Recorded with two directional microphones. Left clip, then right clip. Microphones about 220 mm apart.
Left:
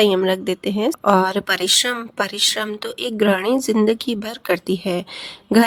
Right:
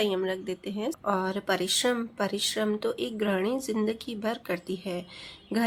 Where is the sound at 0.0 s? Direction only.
50° left (ahead or behind).